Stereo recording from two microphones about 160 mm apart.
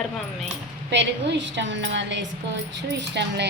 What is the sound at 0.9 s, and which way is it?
A woman's voice, 90° right.